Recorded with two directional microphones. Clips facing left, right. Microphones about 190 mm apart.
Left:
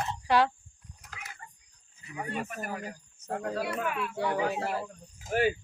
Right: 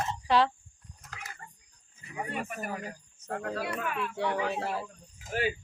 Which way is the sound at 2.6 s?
5° left (ahead or behind).